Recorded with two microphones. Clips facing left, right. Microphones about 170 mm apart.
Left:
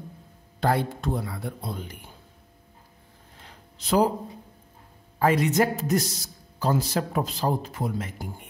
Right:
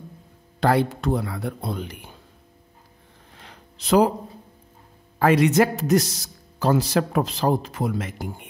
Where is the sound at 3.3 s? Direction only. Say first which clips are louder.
Right 3 dB; 85° right.